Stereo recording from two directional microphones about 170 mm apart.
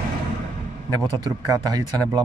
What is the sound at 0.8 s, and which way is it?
Speech, 20° right (ahead or behind).